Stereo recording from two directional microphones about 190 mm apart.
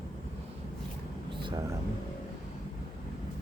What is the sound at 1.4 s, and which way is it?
Air conditioning, 25° right (ahead or behind).